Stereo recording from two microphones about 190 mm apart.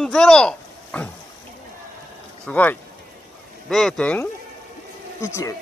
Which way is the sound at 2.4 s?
10° left (ahead or behind).